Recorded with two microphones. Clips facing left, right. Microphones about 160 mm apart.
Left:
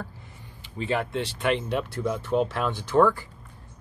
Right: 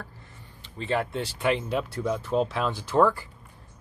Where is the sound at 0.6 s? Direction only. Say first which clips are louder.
Even; 5° left (ahead or behind).